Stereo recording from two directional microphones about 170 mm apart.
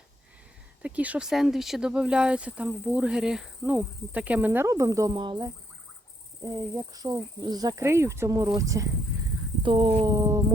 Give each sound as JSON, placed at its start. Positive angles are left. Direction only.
{"t": 0.8, "sound": "speech", "side_deg": -10}